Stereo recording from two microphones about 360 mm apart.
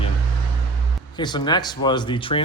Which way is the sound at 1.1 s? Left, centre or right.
Centre.